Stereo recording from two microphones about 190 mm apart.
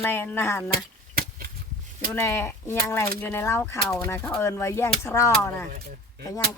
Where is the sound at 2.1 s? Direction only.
15° left (ahead or behind).